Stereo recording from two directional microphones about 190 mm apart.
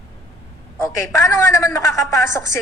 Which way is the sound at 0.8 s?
15° left (ahead or behind).